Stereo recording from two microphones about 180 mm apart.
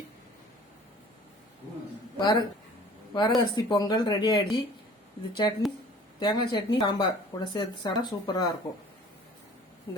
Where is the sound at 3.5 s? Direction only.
25° left (ahead or behind).